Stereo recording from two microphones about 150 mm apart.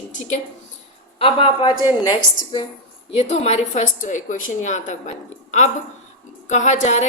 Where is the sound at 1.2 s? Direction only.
35° left (ahead or behind).